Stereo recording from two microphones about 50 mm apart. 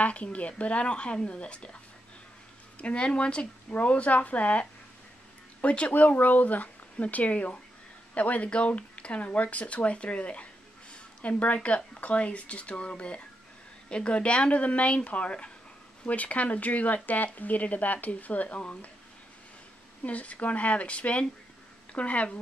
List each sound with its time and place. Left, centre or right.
0.0 s speech: left
2.8 s speech: left
20.0 s speech: left